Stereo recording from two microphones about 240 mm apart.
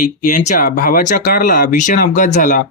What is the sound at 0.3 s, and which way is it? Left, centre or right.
Speech, left.